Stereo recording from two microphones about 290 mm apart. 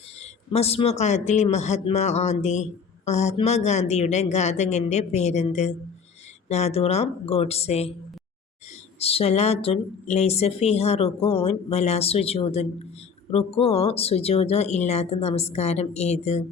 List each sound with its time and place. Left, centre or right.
0.2 s speech: left
9.0 s speech: centre